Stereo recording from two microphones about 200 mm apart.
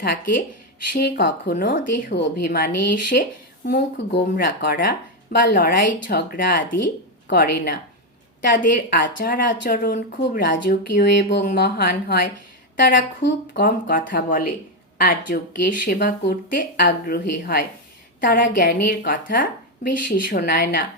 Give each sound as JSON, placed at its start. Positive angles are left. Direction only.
{"t": 0.0, "sound": "speech", "side_deg": 50}
{"t": 3.7, "sound": "speech", "side_deg": 60}
{"t": 8.9, "sound": "speech", "side_deg": 45}
{"t": 13.5, "sound": "a woman's voice", "side_deg": 50}